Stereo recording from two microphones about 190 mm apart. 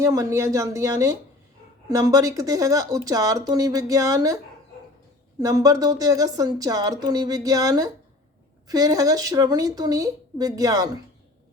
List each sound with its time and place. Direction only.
0.0 s speech: 15° right (ahead or behind)
5.4 s speech: 20° right (ahead or behind)